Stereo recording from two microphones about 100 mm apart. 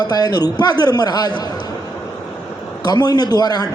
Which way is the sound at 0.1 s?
40° left (ahead or behind).